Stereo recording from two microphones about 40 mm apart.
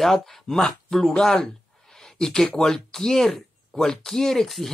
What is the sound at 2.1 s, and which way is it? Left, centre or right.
Speech, centre.